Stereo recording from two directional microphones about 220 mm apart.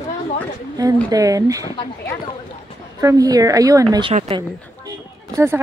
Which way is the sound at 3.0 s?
15° right (ahead or behind).